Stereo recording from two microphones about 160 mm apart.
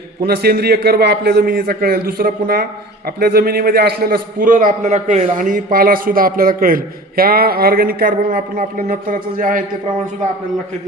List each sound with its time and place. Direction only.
0.2 s a man's voice: 75° right (ahead or behind); by 9.6 s 55° right (ahead or behind)